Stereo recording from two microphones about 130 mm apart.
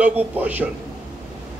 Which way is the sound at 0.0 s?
10° right (ahead or behind).